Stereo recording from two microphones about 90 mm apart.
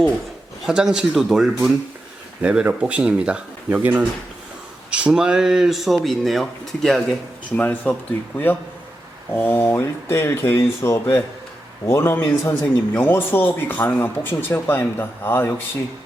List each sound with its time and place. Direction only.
0.6 s speech: 10° right (ahead or behind)
2.4 s speech: 10° right (ahead or behind); by 7.2 s 5° left (ahead or behind)
7.5 s speech: 15° left (ahead or behind)
9.3 s speech: 25° left (ahead or behind)